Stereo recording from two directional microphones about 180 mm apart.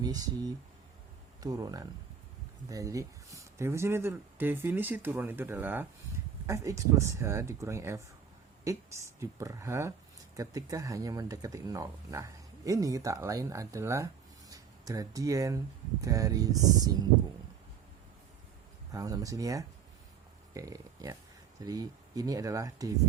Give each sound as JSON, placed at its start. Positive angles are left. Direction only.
{"t": 0.0, "sound": "speech", "side_deg": -20}
{"t": 18.9, "sound": "speech", "side_deg": -20}